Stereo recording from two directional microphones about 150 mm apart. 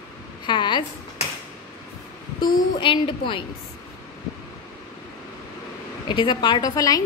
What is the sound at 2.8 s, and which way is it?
Speech, 35° left (ahead or behind).